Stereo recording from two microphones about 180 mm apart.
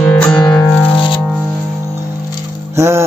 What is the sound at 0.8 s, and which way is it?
Music, 30° left (ahead or behind).